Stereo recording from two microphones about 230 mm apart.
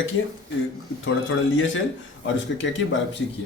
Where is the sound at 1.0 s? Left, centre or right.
Left.